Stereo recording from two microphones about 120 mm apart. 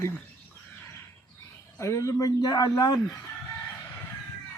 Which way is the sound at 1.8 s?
25° left (ahead or behind).